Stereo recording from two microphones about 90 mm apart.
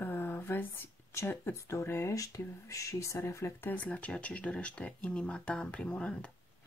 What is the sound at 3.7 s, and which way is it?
Speech, 15° left (ahead or behind).